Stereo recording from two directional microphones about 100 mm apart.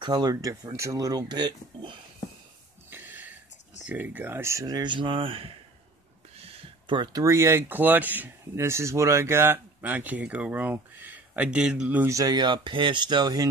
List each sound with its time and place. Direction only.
0.0 s speech: 40° right (ahead or behind)
2.9 s a sound: 15° right (ahead or behind)
3.8 s speech: 15° right (ahead or behind)
4.6 s speech: 45° right (ahead or behind); by 5.6 s 70° right (ahead or behind)
6.3 s a sound: 75° right (ahead or behind); by 7.2 s 45° right (ahead or behind)
7.2 s speech: 25° right (ahead or behind); by 12.0 s 10° right (ahead or behind)
12.1 s speech: 40° right (ahead or behind)